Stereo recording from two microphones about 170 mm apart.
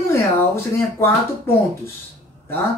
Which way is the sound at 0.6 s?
15° left (ahead or behind).